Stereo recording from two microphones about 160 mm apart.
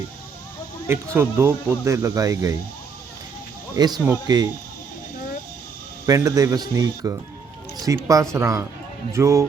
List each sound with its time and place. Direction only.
0.9 s speech: 15° right (ahead or behind)
3.8 s speech: 25° right (ahead or behind)
6.1 s speech: 20° right (ahead or behind)